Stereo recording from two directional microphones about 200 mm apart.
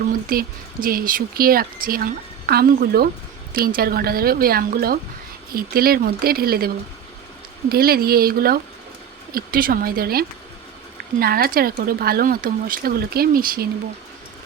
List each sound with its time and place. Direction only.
0.1 s speech: 45° right (ahead or behind)
7.7 s speech: 50° right (ahead or behind)